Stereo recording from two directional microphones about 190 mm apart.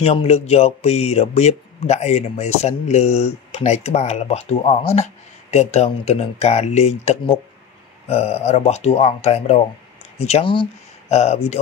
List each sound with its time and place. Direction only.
0.0 s speech: 30° left (ahead or behind)